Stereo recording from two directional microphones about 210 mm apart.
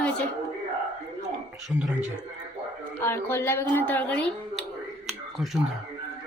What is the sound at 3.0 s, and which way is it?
Speech, 10° left (ahead or behind).